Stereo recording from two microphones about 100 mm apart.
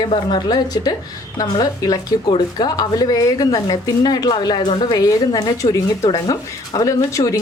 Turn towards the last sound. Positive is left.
turn(degrees=30)  # may be behind; listen again after turning